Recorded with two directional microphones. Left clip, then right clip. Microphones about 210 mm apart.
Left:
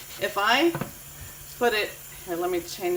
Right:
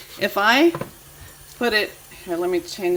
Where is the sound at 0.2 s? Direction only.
40° right (ahead or behind).